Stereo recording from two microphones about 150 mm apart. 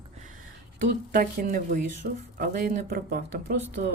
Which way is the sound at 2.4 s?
75° right (ahead or behind).